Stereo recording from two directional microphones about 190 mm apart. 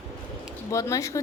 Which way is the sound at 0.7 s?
15° left (ahead or behind).